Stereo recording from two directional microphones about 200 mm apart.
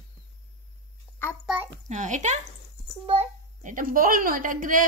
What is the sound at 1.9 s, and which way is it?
A child's voice, 35° right (ahead or behind).